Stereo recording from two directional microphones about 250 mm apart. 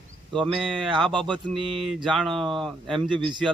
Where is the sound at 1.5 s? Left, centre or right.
Centre.